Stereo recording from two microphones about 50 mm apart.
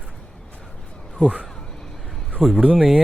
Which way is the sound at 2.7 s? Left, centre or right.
Centre.